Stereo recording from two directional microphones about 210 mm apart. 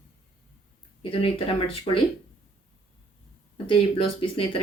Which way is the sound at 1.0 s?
25° left (ahead or behind).